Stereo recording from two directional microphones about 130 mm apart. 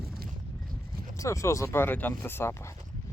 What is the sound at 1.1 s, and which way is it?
Speech, 25° left (ahead or behind).